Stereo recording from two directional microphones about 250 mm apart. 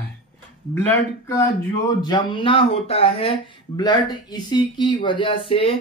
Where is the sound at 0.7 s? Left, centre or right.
Centre.